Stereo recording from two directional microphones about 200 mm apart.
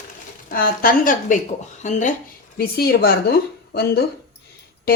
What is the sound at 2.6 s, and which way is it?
Speech, 50° left (ahead or behind).